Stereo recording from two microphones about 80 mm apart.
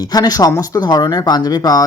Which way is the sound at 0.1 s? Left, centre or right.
Left.